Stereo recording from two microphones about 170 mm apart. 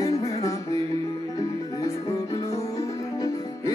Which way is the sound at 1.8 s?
20° left (ahead or behind).